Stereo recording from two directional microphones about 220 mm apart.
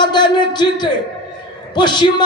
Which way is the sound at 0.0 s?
20° left (ahead or behind).